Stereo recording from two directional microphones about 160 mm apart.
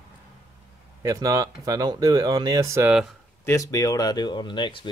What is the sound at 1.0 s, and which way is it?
Speech, 20° right (ahead or behind).